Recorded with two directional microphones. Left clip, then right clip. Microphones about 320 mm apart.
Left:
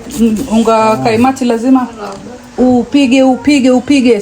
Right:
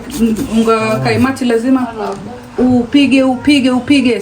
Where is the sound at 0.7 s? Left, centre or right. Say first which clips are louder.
Left 5 dB; centre.